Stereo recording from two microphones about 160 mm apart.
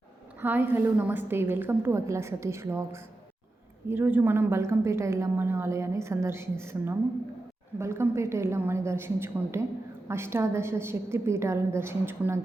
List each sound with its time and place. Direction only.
0.4 s a woman's voice: 10° right (ahead or behind)